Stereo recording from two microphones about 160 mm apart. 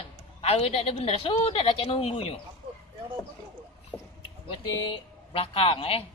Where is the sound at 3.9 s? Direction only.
5° left (ahead or behind).